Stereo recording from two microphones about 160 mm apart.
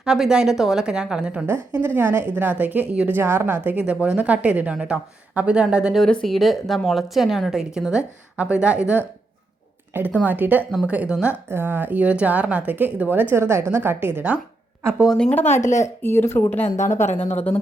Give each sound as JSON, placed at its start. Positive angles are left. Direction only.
{"t": 0.0, "sound": "a woman's voice", "side_deg": -5}
{"t": 9.9, "sound": "a woman's voice", "side_deg": -10}
{"t": 14.9, "sound": "a woman's voice", "side_deg": 0}
{"t": 15.4, "sound": "speech", "side_deg": 50}
{"t": 15.8, "sound": "speech", "side_deg": 15}
{"t": 16.6, "sound": "speech", "side_deg": 50}
{"t": 17.3, "sound": "speech", "side_deg": 10}